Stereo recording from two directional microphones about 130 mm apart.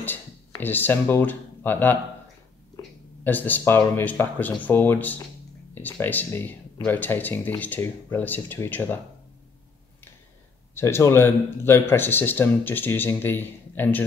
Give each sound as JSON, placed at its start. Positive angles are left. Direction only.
{"t": 0.0, "sound": "speech", "side_deg": 15}
{"t": 3.3, "sound": "speech", "side_deg": 15}
{"t": 10.7, "sound": "speech", "side_deg": 20}